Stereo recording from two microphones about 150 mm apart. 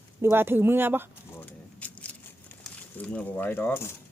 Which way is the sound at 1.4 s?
10° left (ahead or behind).